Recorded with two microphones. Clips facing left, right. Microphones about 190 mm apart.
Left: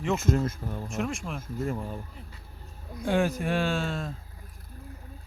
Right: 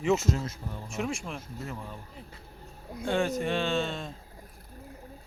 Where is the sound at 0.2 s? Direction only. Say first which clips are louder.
Left 4 dB; 55° left (ahead or behind).